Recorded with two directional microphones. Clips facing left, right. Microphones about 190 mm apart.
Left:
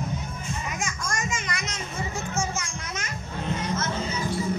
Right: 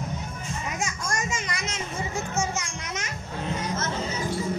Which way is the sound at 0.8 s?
35° right (ahead or behind).